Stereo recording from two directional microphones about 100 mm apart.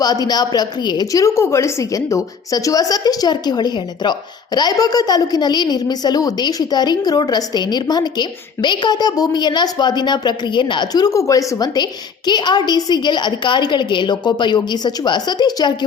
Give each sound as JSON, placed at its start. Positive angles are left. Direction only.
{"t": 0.0, "sound": "a woman's voice", "side_deg": 40}
{"t": 1.1, "sound": "a woman's voice", "side_deg": 30}